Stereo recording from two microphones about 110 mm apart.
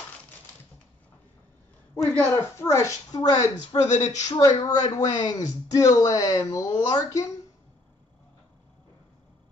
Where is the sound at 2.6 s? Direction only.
25° left (ahead or behind).